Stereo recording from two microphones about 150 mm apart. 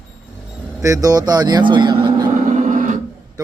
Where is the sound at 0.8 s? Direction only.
20° right (ahead or behind).